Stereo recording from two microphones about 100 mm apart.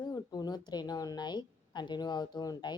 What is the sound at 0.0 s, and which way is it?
A woman's voice, 40° left (ahead or behind).